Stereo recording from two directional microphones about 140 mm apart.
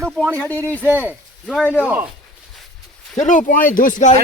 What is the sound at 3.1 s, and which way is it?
Speech, 65° left (ahead or behind).